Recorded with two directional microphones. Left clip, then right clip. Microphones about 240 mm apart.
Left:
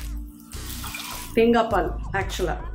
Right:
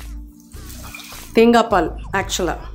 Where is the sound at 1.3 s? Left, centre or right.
Right.